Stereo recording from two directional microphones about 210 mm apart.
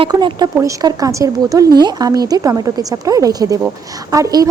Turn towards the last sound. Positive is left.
turn(degrees=-15)  # may be behind; listen again after turning